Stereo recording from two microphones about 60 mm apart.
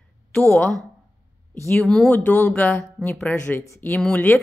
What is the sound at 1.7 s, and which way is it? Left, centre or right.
Speech, centre.